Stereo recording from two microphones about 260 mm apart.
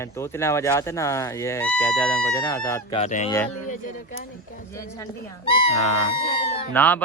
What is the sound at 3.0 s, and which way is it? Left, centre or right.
Speech, left.